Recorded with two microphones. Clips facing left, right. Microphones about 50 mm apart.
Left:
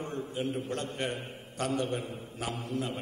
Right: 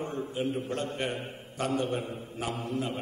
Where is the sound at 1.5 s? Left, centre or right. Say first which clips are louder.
Right 1 dB; right.